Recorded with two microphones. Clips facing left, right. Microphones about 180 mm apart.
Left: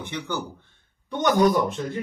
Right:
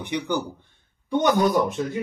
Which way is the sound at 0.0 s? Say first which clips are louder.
Right 5 dB; 15° right (ahead or behind).